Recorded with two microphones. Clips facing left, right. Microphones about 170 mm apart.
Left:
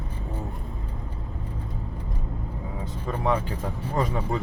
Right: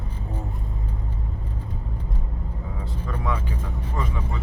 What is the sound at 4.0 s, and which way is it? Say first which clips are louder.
Speech: left 5 dB; 35° left (ahead or behind).